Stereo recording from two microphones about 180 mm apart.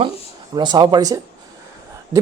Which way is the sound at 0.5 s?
25° right (ahead or behind).